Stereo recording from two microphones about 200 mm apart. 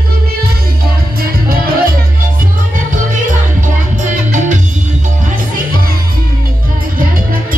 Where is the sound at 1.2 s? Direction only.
50° right (ahead or behind).